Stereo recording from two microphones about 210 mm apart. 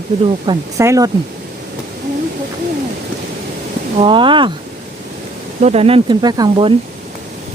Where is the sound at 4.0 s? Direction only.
25° right (ahead or behind).